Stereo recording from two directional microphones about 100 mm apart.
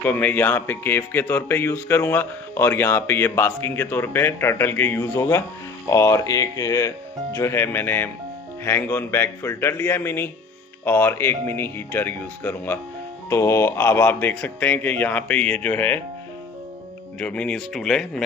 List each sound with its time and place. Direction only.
0.0 s speech: 20° left (ahead or behind)
17.2 s speech: 10° left (ahead or behind)